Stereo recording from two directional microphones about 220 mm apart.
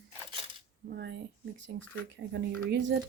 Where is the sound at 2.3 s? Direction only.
50° right (ahead or behind).